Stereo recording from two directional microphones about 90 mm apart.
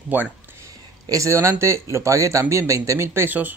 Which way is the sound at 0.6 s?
35° right (ahead or behind).